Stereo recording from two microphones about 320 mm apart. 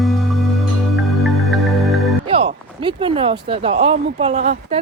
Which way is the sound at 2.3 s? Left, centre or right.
Centre.